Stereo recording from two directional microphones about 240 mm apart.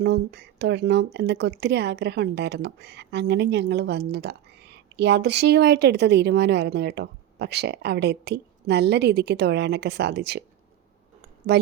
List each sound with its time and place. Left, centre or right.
0.0 s a woman's voice: right